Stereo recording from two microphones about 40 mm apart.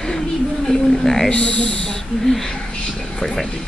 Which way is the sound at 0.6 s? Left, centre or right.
Centre.